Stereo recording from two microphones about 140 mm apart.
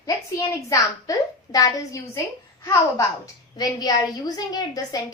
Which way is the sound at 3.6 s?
30° left (ahead or behind).